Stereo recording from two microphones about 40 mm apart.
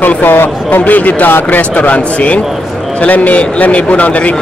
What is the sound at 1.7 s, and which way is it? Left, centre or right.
A man's voice, left.